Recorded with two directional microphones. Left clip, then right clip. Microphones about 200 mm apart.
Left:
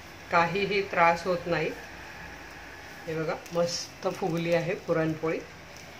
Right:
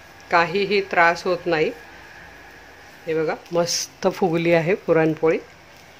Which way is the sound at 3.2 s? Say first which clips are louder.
Right 3 dB; 50° right (ahead or behind).